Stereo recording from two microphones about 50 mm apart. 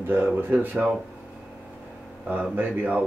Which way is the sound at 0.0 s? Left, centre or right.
Right.